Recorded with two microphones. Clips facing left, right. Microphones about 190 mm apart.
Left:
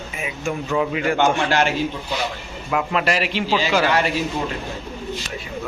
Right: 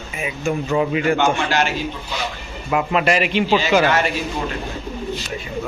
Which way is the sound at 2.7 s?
5° right (ahead or behind).